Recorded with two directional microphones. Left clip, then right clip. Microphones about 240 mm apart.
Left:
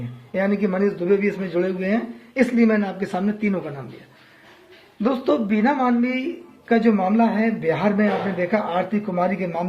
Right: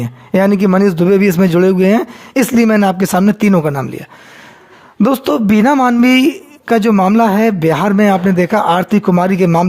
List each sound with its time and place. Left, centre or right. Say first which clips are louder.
0.3 s speech: right 10 dB; right
5.0 s speech: right 7 dB; right